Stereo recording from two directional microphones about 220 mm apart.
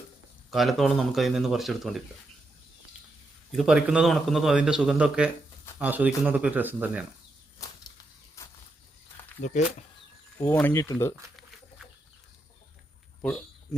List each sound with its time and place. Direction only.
0.5 s a man's voice: centre (ahead or behind)
3.5 s a man's voice: centre (ahead or behind)
7.6 s whip: 15° left (ahead or behind)
9.4 s speech: 35° left (ahead or behind)
10.4 s speech: 10° left (ahead or behind)